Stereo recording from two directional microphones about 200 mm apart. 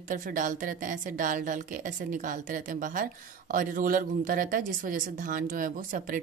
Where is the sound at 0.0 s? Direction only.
40° right (ahead or behind).